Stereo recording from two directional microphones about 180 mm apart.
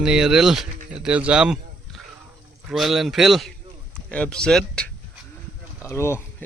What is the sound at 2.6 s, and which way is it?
Speech, centre (ahead or behind).